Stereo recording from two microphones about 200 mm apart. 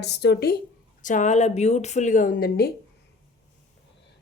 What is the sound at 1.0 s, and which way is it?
A woman's voice, 40° left (ahead or behind).